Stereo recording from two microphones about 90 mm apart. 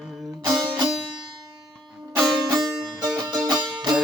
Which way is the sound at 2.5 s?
45° right (ahead or behind).